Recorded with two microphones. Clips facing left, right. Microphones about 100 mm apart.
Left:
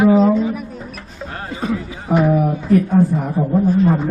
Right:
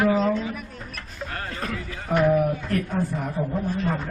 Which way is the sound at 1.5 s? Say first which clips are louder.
Left 13 dB; 5° left (ahead or behind).